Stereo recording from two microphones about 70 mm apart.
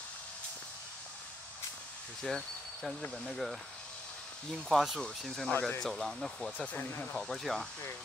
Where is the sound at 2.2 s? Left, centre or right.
Centre.